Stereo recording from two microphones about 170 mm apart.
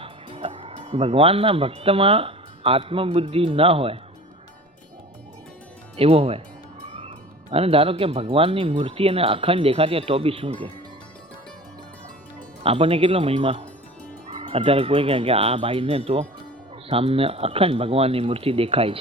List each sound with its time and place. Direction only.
0.0 s speech: 35° right (ahead or behind)
6.0 s speech: 35° right (ahead or behind)
6.8 s music: 40° right (ahead or behind)
7.5 s speech: 35° right (ahead or behind)
12.6 s speech: 35° right (ahead or behind)